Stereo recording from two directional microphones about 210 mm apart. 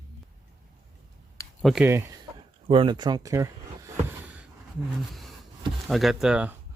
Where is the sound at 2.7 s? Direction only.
25° right (ahead or behind).